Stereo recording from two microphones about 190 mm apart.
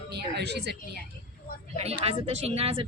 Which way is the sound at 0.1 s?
60° right (ahead or behind).